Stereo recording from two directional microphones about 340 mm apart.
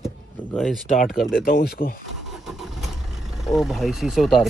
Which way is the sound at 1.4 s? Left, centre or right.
Left.